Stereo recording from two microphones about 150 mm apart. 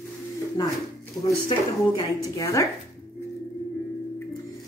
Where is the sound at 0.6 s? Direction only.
25° left (ahead or behind).